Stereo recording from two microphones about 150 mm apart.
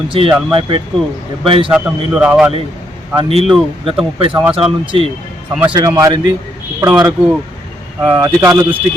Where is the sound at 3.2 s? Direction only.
40° right (ahead or behind).